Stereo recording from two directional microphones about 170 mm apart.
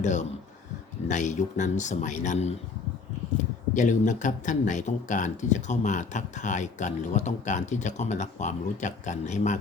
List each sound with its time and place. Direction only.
0.0 s speech: 45° left (ahead or behind)
3.8 s speech: 45° left (ahead or behind)